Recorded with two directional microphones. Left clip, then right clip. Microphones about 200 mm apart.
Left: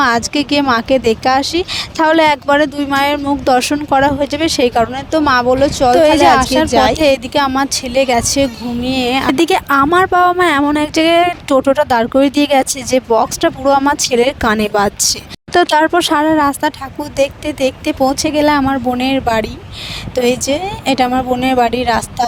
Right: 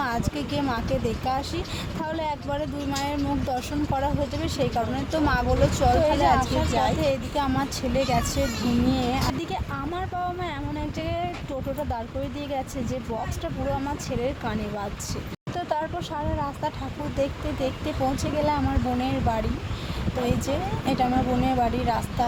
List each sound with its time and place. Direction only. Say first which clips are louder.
0.0 s speech: left 15 dB; 50° left (ahead or behind)